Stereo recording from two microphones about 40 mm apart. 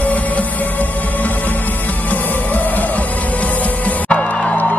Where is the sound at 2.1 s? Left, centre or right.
Left.